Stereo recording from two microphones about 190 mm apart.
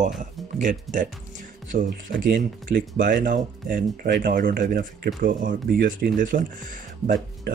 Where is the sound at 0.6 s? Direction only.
45° right (ahead or behind).